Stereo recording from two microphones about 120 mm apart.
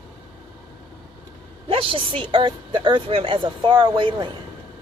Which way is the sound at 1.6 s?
50° right (ahead or behind).